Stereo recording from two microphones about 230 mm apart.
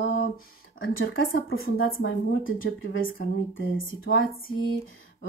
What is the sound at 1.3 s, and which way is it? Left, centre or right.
Speech, left.